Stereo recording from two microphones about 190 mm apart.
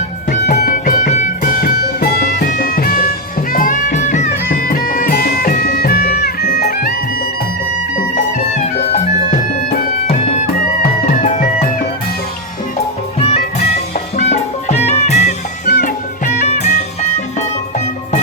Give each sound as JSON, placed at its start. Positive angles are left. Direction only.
{"t": 0.3, "sound": "music", "side_deg": 50}
{"t": 13.1, "sound": "music", "side_deg": 30}
{"t": 15.6, "sound": "music", "side_deg": 50}